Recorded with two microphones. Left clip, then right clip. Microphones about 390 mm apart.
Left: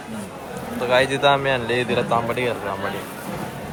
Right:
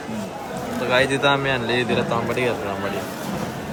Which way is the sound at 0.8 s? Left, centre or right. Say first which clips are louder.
Left 1 dB; centre.